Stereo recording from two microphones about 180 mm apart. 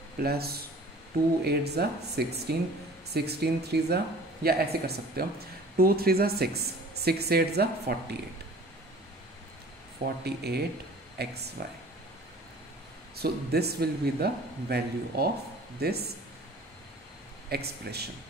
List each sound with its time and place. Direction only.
0.2 s speech: 60° right (ahead or behind)
10.2 s speech: 65° right (ahead or behind)
13.1 s speech: 60° right (ahead or behind)
17.5 s speech: 60° right (ahead or behind)